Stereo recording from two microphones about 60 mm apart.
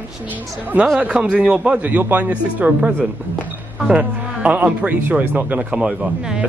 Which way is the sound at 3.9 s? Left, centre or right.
Centre.